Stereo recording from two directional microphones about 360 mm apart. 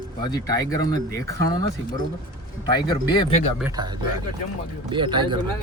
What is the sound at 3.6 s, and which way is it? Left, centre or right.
A man's voice, centre.